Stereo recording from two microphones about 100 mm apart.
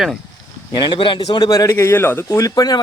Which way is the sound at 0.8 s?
55° left (ahead or behind).